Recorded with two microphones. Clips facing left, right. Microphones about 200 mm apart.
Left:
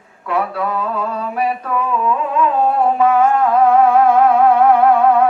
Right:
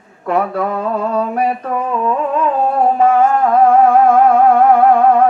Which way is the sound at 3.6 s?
50° right (ahead or behind).